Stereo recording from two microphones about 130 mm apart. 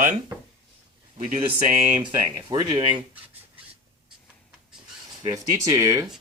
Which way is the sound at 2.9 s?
10° right (ahead or behind).